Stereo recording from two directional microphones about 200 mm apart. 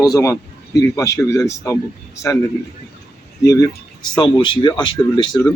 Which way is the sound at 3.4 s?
15° left (ahead or behind).